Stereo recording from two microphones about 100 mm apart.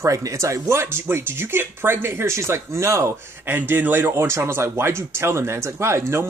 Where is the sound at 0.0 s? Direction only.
30° right (ahead or behind).